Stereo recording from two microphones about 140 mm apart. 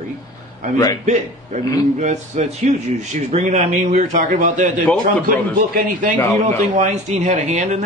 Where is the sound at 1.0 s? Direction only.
55° right (ahead or behind).